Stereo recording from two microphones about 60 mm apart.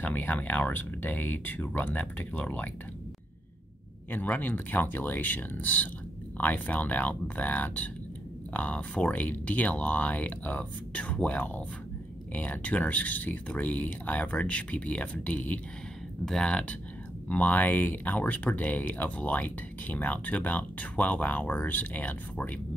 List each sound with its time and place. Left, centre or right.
0.0 s speech: left
4.1 s speech: left
16.3 s speech: centre